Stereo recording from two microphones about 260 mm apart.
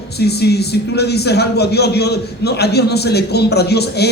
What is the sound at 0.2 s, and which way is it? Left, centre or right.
A man's voice, left.